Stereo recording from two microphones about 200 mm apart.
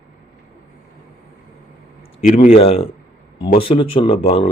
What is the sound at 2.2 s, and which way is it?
Speech, 40° left (ahead or behind).